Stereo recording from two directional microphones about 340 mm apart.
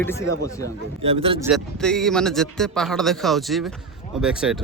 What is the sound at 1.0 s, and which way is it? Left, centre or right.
Speech, centre.